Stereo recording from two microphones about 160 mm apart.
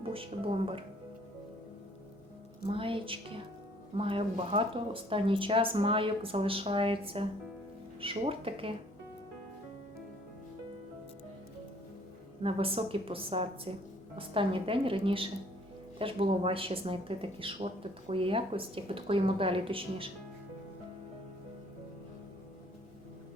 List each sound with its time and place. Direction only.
0.1 s speech: 35° right (ahead or behind)
2.6 s speech: 35° right (ahead or behind)
12.4 s speech: 35° right (ahead or behind)